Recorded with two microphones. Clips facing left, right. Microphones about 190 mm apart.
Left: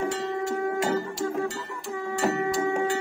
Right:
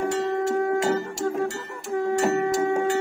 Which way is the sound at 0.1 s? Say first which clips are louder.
Right 5 dB; 45° right (ahead or behind).